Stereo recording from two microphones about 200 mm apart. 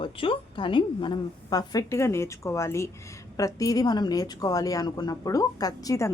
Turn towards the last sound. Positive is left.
turn(degrees=15)  # may be behind; listen again after turning